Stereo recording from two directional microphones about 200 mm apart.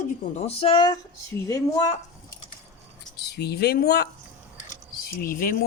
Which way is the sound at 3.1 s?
55° left (ahead or behind).